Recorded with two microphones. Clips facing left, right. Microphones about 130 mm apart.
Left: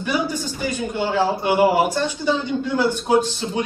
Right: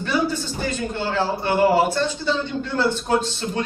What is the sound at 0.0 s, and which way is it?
A man's voice, 15° left (ahead or behind).